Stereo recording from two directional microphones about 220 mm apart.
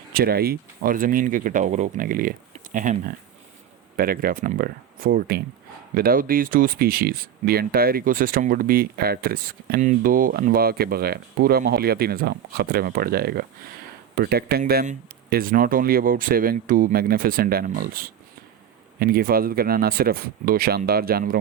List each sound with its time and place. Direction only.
0.1 s speech: 45° right (ahead or behind)